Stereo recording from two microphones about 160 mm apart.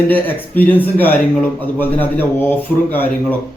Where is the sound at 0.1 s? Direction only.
10° left (ahead or behind).